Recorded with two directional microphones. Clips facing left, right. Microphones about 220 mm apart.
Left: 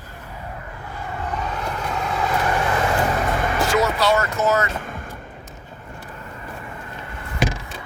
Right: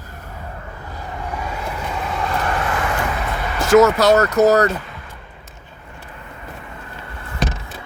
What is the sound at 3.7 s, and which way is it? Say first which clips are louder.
Speech: right 10 dB; 45° right (ahead or behind).